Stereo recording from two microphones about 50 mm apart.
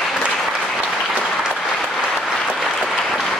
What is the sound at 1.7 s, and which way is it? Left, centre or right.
Applause, centre.